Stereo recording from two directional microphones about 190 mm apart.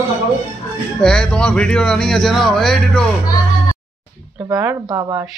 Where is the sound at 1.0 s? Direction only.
5° left (ahead or behind).